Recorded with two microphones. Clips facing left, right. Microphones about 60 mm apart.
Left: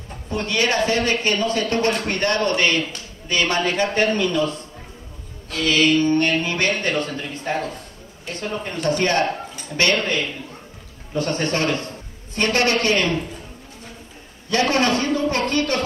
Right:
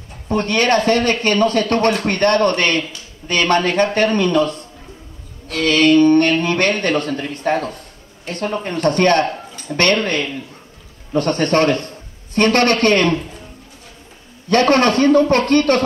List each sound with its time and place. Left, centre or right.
0.3 s speech: right
5.5 s speech: right
14.5 s speech: right